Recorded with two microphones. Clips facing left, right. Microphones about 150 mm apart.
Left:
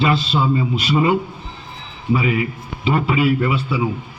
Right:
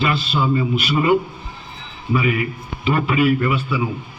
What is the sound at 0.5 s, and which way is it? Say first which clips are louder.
Speech: left 1 dB; 20° left (ahead or behind).